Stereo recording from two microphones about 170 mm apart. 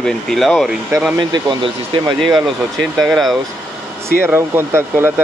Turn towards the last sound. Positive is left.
turn(degrees=-15)  # may be behind; listen again after turning